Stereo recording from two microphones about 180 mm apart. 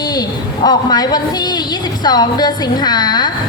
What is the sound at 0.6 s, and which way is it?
A woman's voice, 20° left (ahead or behind).